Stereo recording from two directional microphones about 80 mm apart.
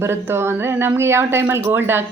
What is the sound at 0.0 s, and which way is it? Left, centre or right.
Speech, right.